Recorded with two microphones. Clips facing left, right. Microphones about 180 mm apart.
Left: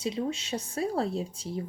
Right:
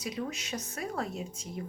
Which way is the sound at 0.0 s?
30° left (ahead or behind).